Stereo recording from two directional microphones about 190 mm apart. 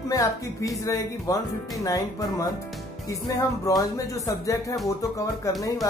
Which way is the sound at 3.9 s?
15° left (ahead or behind).